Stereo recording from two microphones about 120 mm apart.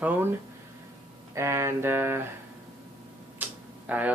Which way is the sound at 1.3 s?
25° right (ahead or behind).